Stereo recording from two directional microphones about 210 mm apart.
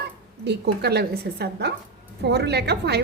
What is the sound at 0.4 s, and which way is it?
A woman's voice, 50° right (ahead or behind).